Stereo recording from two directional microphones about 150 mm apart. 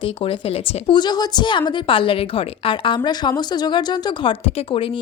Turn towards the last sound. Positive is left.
turn(degrees=40)  # may be behind; listen again after turning